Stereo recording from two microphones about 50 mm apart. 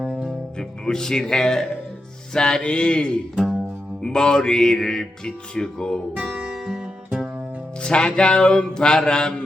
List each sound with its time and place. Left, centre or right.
0.0 s music: centre
0.9 s music: centre
3.3 s music: centre
4.0 s music: centre
6.1 s music: centre
7.8 s music: centre